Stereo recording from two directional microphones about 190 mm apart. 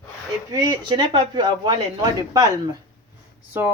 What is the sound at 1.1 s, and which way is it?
Speech, 20° right (ahead or behind).